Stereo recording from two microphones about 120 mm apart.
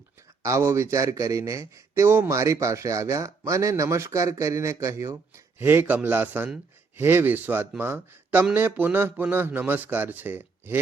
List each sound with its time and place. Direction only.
0.4 s a man's voice: 25° right (ahead or behind)